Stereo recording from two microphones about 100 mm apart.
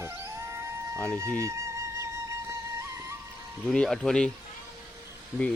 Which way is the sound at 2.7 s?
30° right (ahead or behind).